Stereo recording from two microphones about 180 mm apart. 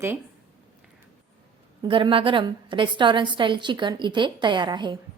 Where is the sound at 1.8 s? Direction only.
30° right (ahead or behind).